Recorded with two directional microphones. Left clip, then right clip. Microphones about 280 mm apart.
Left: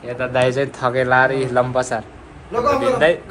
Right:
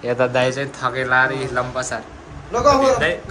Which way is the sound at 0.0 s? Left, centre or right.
Right.